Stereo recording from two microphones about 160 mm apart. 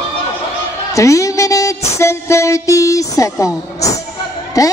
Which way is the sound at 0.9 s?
20° left (ahead or behind).